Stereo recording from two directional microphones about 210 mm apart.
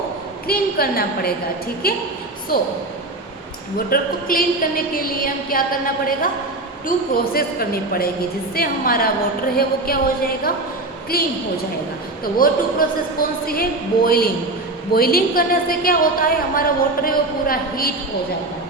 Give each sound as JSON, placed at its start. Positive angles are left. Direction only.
{"t": 0.4, "sound": "a woman's voice", "side_deg": 45}
{"t": 3.8, "sound": "a woman's voice", "side_deg": 45}
{"t": 6.8, "sound": "a woman's voice", "side_deg": 45}
{"t": 11.1, "sound": "a woman's voice", "side_deg": 45}
{"t": 12.4, "sound": "a woman's voice", "side_deg": 45}